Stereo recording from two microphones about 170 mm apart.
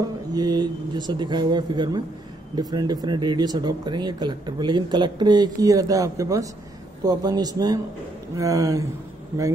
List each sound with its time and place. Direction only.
0.3 s speech: 25° right (ahead or behind)